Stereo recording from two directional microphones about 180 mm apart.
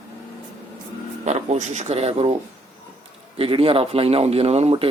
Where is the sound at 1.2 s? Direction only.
40° right (ahead or behind).